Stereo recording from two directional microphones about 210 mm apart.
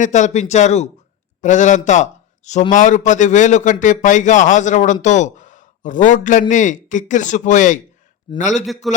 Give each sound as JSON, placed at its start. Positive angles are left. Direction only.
{"t": 0.0, "sound": "a man's voice", "side_deg": 35}
{"t": 8.6, "sound": "a man's voice", "side_deg": 0}